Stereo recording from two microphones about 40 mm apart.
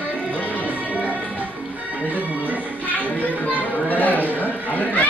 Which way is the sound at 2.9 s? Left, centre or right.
Left.